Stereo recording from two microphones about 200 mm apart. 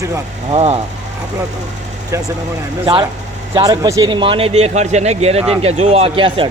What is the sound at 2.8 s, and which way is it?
A man's voice, 25° right (ahead or behind).